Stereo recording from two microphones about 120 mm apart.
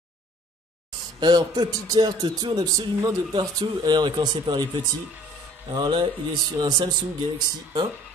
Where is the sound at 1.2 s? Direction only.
35° right (ahead or behind).